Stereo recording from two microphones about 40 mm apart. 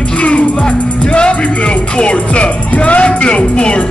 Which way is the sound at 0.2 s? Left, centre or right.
Left.